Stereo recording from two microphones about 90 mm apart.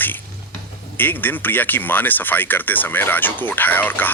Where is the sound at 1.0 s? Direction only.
20° left (ahead or behind).